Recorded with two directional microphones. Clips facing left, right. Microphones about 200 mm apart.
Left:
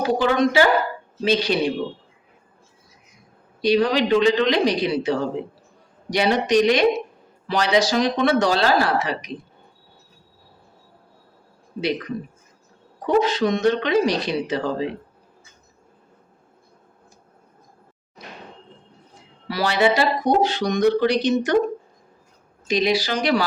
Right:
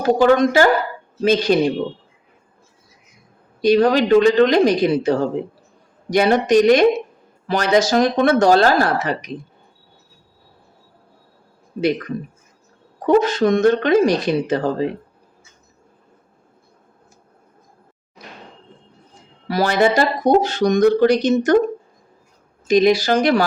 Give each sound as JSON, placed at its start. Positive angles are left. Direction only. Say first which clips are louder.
{"t": 0.0, "sound": "speech", "louder": "right 5 dB", "side_deg": -45}
{"t": 3.6, "sound": "speech", "louder": "right 4 dB", "side_deg": -50}
{"t": 11.8, "sound": "speech", "louder": "right 5 dB", "side_deg": -50}
{"t": 19.5, "sound": "speech", "louder": "right 3 dB", "side_deg": -45}
{"t": 22.6, "sound": "speech", "louder": "right 7 dB", "side_deg": -50}